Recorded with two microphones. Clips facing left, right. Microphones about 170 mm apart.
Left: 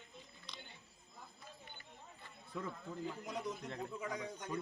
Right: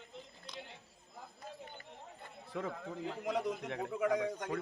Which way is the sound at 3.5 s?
75° right (ahead or behind).